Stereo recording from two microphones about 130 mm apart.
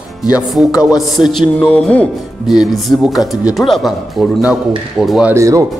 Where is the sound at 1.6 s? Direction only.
10° left (ahead or behind).